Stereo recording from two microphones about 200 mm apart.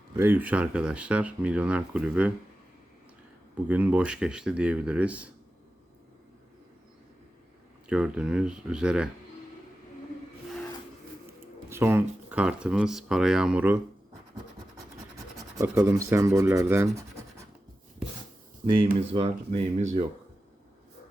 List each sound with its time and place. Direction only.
0.2 s speech: 10° right (ahead or behind)
3.7 s speech: 10° right (ahead or behind)
7.9 s speech: 5° right (ahead or behind)
11.7 s speech: 10° right (ahead or behind)
15.1 s speech: 15° right (ahead or behind)
18.9 s speech: 30° right (ahead or behind)